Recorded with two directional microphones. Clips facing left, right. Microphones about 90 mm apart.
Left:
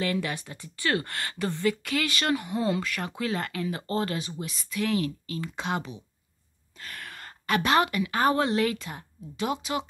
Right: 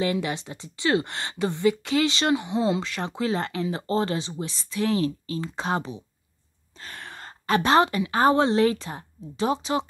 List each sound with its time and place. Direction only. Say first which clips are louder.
0.0 s a woman's voice: right 3 dB; 20° right (ahead or behind)